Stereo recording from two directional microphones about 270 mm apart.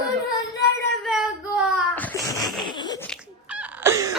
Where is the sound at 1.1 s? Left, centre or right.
Centre.